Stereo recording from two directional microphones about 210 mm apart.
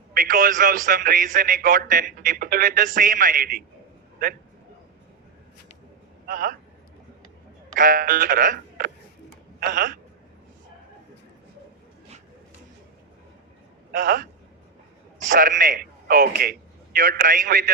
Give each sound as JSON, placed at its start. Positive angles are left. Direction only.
{"t": 0.1, "sound": "a man's voice", "side_deg": -40}
{"t": 6.2, "sound": "speech", "side_deg": -40}
{"t": 7.8, "sound": "a man's voice", "side_deg": -40}
{"t": 13.9, "sound": "a man's voice", "side_deg": -40}
{"t": 15.3, "sound": "a man's voice", "side_deg": -40}